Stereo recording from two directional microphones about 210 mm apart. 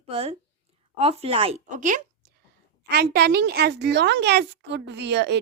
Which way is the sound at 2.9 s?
50° right (ahead or behind).